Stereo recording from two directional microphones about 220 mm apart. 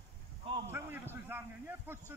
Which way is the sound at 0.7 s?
10° right (ahead or behind).